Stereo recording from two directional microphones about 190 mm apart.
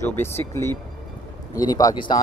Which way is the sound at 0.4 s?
10° left (ahead or behind).